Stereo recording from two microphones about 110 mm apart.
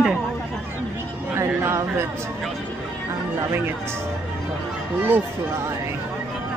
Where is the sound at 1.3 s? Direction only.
25° right (ahead or behind).